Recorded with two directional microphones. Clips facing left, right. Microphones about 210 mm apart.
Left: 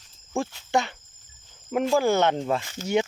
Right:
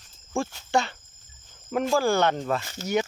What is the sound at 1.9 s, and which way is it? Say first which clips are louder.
Speech: left 1 dB; 20° left (ahead or behind).